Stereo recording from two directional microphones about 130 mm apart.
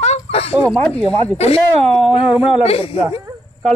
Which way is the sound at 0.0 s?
55° left (ahead or behind).